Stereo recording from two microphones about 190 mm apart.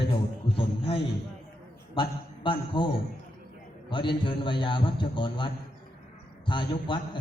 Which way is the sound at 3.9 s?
25° left (ahead or behind).